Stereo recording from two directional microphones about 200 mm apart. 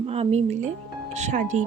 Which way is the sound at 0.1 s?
30° right (ahead or behind).